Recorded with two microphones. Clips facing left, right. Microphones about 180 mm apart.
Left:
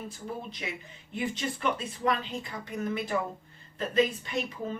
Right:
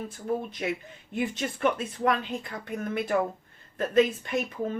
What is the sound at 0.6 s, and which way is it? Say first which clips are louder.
A woman's voice: right 8 dB; 50° right (ahead or behind).